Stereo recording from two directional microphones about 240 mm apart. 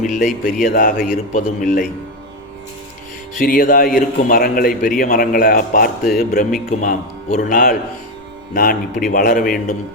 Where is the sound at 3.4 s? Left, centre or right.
Left.